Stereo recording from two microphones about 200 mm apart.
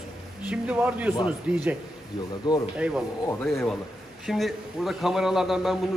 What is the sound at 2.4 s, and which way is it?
Speech, 20° left (ahead or behind).